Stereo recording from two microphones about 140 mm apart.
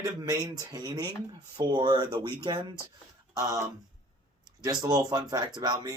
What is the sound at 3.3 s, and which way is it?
Speech, 25° right (ahead or behind).